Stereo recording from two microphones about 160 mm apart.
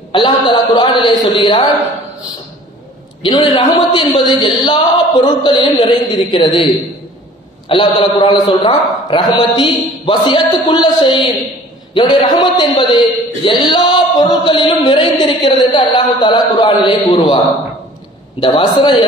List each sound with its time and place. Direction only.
0.1 s a sound: 30° left (ahead or behind)
3.2 s speech: 30° left (ahead or behind)
18.4 s a man's voice: 30° left (ahead or behind)